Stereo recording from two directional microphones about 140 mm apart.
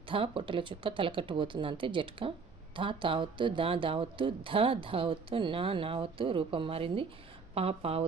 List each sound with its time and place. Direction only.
0.1 s speech: 40° right (ahead or behind)